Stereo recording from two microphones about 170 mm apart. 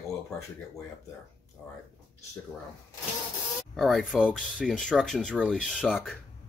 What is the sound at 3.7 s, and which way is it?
Speech, centre (ahead or behind).